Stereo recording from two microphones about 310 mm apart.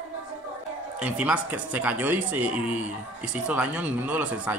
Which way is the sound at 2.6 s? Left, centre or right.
Left.